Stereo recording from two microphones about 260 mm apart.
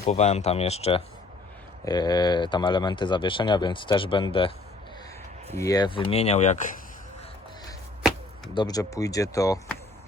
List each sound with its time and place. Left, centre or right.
0.0 s speech: left
5.5 s speech: centre
8.5 s speech: centre